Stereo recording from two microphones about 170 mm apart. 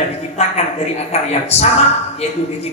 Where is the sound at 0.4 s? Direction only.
40° left (ahead or behind).